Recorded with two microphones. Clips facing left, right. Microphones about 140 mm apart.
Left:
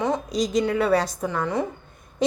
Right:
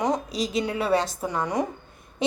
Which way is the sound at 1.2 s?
15° right (ahead or behind).